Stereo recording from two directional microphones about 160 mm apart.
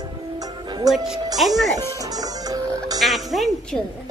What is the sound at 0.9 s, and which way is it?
Speech, centre (ahead or behind).